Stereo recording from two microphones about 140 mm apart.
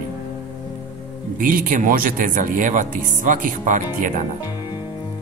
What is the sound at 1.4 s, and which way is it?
Speech, 75° right (ahead or behind).